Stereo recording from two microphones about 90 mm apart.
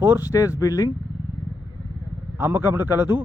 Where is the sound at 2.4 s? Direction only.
25° right (ahead or behind).